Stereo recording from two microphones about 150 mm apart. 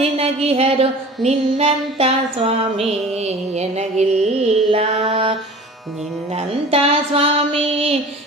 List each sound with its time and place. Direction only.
0.0 s music: 40° right (ahead or behind)
7.1 s music: 40° right (ahead or behind)